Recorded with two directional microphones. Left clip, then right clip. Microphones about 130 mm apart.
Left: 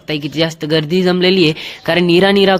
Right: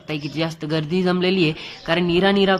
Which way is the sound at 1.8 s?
40° left (ahead or behind).